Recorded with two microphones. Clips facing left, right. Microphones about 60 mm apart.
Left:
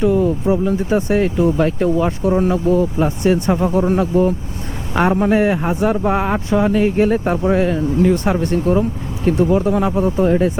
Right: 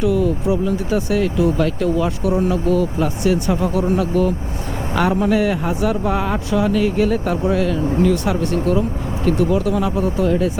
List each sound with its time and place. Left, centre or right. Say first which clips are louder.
0.0 s speech: left 2 dB; left